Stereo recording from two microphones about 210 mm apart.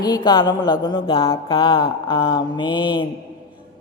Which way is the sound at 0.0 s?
20° left (ahead or behind).